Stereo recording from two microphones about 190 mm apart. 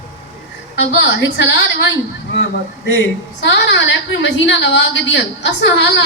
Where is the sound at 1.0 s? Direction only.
70° left (ahead or behind).